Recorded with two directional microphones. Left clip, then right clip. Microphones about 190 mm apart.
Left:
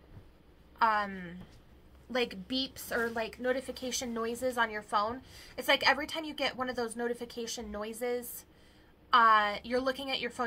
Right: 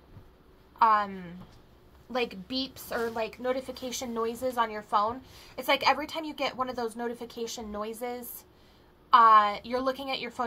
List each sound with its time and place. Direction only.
0.7 s a woman's voice: 10° left (ahead or behind)